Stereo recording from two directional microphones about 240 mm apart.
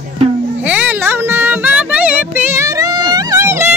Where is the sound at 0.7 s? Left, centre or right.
Centre.